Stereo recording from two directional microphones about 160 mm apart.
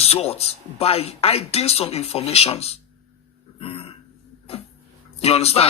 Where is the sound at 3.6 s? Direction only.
35° left (ahead or behind).